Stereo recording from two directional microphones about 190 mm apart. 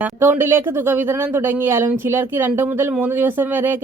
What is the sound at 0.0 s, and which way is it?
Speech, 10° right (ahead or behind).